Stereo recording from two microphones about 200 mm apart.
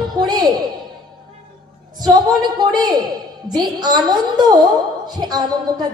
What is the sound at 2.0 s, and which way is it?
A woman's voice, 20° right (ahead or behind).